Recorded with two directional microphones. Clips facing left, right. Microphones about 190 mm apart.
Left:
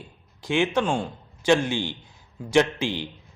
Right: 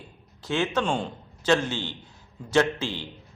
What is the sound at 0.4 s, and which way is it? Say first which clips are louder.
A man's voice: left 3 dB; 15° left (ahead or behind).